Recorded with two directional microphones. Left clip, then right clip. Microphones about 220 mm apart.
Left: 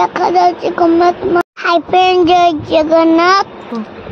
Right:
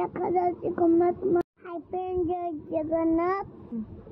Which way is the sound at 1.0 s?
10° left (ahead or behind).